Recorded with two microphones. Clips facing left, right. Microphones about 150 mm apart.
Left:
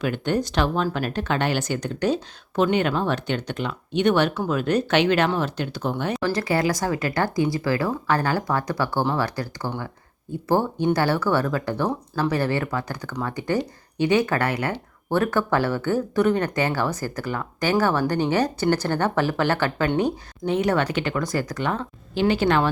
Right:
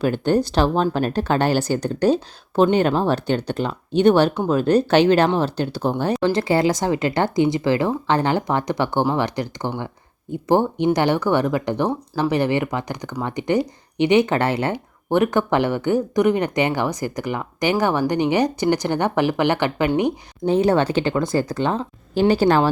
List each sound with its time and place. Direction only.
0.0 s speech: 35° right (ahead or behind); by 19.9 s 15° right (ahead or behind)
20.4 s speech: 30° right (ahead or behind)
22.1 s speech: 40° right (ahead or behind)